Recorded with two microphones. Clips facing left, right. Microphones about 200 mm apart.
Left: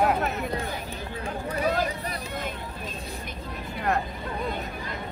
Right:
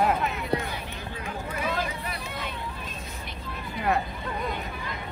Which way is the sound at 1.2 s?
40° left (ahead or behind).